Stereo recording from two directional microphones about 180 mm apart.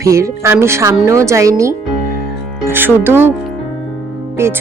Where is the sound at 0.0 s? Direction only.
15° right (ahead or behind).